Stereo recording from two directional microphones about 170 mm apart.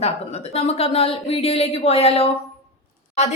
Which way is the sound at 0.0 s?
40° left (ahead or behind).